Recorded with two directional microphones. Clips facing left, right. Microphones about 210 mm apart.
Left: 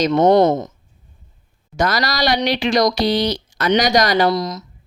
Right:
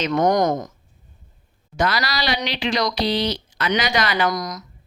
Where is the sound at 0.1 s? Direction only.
25° left (ahead or behind).